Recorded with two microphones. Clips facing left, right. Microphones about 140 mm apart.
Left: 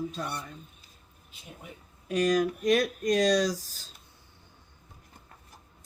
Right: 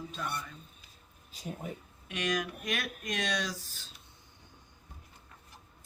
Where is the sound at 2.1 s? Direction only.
35° left (ahead or behind).